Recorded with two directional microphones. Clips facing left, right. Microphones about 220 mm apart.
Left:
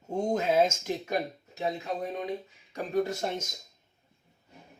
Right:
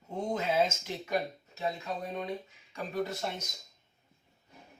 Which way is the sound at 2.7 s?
45° left (ahead or behind).